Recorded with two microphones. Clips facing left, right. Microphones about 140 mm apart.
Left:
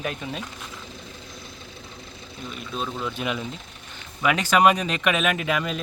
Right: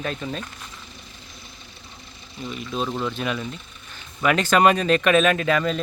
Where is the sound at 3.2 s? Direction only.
15° left (ahead or behind).